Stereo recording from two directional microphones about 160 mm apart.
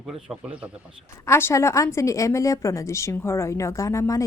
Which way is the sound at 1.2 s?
15° left (ahead or behind).